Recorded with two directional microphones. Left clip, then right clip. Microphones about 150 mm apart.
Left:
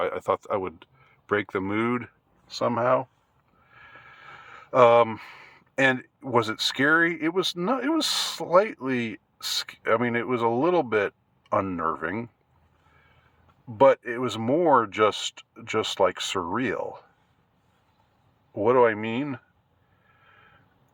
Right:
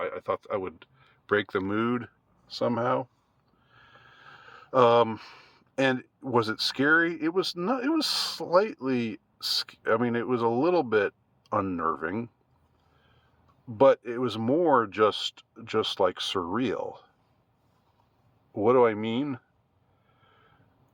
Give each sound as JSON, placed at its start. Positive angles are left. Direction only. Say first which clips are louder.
{"t": 0.0, "sound": "speech", "louder": "left 5 dB", "side_deg": 45}
{"t": 0.6, "sound": "speech", "louder": "left 3 dB", "side_deg": 20}
{"t": 13.7, "sound": "speech", "louder": "left 2 dB", "side_deg": 5}
{"t": 18.5, "sound": "speech", "louder": "left 2 dB", "side_deg": 5}